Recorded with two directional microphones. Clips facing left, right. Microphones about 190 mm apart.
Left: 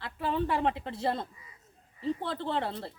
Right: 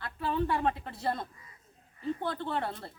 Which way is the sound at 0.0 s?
25° left (ahead or behind).